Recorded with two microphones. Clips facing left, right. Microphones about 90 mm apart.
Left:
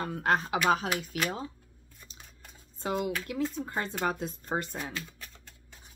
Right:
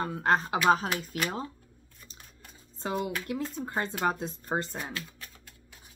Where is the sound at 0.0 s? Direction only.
30° right (ahead or behind).